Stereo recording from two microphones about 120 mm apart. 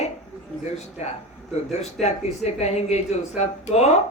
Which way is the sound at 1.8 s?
65° left (ahead or behind).